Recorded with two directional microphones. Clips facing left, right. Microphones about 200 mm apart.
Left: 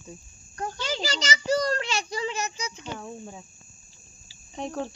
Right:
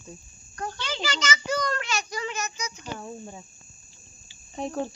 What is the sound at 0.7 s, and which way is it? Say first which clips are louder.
A child's voice: left 2 dB; 40° left (ahead or behind).